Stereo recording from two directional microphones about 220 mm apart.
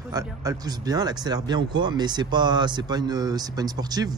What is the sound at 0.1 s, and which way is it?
Speech, 15° right (ahead or behind).